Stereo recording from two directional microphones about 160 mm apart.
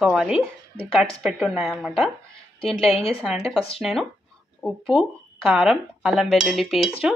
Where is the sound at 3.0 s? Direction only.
35° left (ahead or behind).